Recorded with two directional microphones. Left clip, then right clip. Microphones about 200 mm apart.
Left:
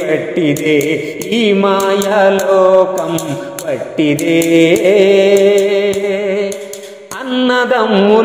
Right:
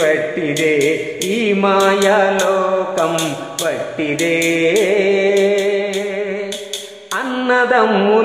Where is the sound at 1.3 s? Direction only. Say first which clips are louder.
Left 3 dB; 40° left (ahead or behind).